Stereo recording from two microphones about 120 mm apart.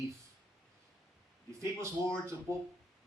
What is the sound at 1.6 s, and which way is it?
Speech, 25° right (ahead or behind).